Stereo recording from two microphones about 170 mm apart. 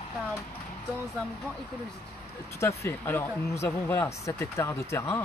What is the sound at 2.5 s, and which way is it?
Speech, 15° left (ahead or behind).